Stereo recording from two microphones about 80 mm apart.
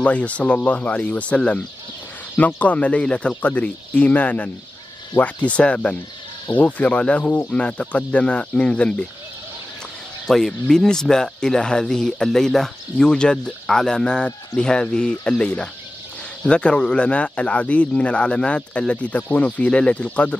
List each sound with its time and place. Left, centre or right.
0.0 s speech: centre
10.2 s speech: centre